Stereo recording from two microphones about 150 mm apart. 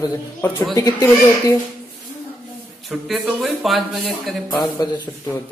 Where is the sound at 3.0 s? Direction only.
Centre (ahead or behind).